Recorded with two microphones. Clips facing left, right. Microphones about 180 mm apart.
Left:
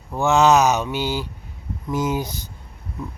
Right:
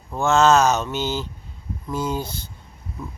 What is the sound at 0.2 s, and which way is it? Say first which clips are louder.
Speech: left 1 dB; 15° left (ahead or behind).